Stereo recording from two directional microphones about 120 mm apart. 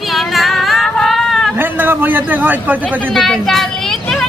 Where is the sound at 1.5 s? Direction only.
15° right (ahead or behind).